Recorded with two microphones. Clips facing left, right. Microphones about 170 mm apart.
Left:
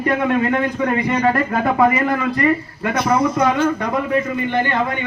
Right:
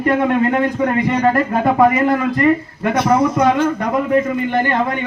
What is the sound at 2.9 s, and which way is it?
A man's voice, 40° right (ahead or behind).